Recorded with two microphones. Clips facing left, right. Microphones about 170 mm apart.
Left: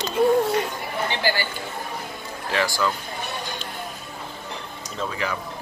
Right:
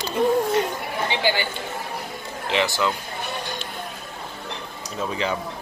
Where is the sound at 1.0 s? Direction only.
15° right (ahead or behind).